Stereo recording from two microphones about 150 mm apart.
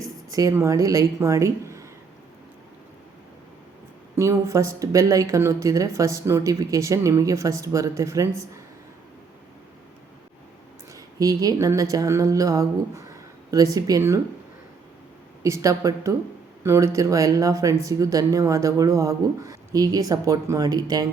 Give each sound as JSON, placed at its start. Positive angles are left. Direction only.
{"t": 0.3, "sound": "speech", "side_deg": -20}
{"t": 4.1, "sound": "speech", "side_deg": -20}
{"t": 10.9, "sound": "speech", "side_deg": -20}
{"t": 15.4, "sound": "speech", "side_deg": -20}